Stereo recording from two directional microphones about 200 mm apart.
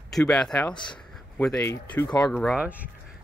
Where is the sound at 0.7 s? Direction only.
25° left (ahead or behind).